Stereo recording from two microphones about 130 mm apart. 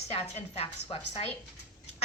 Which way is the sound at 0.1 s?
55° left (ahead or behind).